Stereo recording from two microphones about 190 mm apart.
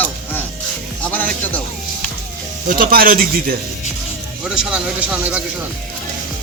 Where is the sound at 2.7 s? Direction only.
50° right (ahead or behind).